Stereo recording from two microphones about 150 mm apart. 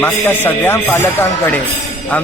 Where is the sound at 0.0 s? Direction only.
15° left (ahead or behind).